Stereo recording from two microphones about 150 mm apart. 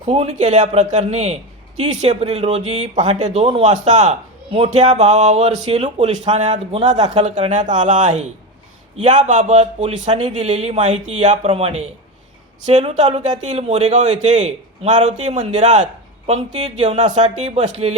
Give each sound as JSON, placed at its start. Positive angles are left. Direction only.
{"t": 0.1, "sound": "a man's voice", "side_deg": -40}